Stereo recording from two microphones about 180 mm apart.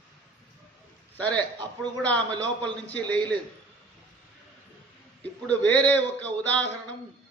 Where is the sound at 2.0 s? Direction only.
5° left (ahead or behind).